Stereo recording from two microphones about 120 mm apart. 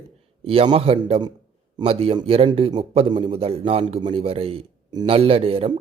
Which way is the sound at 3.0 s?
40° right (ahead or behind).